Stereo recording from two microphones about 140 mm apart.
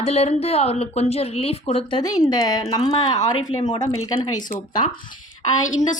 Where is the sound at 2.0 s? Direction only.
25° left (ahead or behind).